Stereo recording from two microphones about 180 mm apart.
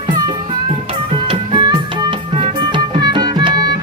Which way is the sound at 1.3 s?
25° right (ahead or behind).